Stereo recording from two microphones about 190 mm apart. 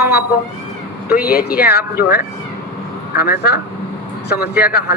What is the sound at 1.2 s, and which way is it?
Speech, 55° left (ahead or behind).